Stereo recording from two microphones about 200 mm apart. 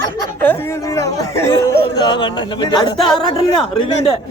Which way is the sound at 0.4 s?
15° left (ahead or behind).